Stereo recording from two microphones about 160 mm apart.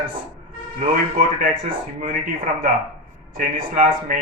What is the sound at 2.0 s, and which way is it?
Speech, 60° right (ahead or behind).